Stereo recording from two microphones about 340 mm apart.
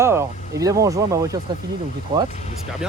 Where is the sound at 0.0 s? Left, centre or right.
Centre.